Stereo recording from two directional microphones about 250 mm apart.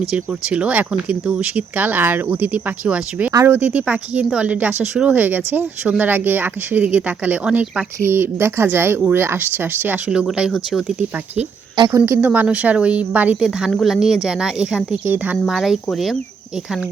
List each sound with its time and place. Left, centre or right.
0.1 s speech: centre
11.8 s speech: centre